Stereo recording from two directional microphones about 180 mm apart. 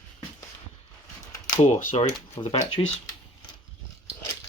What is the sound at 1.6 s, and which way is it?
Speech, 40° left (ahead or behind).